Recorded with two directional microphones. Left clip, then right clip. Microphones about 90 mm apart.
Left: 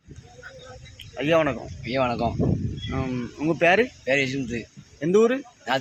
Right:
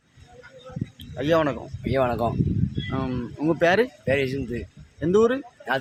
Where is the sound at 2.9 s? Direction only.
25° right (ahead or behind).